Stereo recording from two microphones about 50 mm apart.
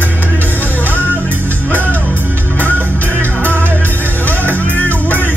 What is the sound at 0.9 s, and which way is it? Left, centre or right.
Music, left.